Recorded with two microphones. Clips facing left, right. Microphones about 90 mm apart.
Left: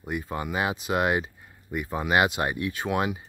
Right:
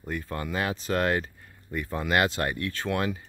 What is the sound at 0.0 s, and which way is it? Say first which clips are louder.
Speech: left 2 dB; 15° left (ahead or behind).